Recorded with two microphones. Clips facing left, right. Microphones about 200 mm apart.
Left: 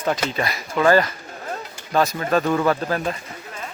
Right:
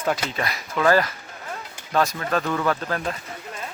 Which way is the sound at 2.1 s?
20° left (ahead or behind).